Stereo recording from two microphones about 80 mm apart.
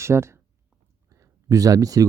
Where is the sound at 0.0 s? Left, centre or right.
Right.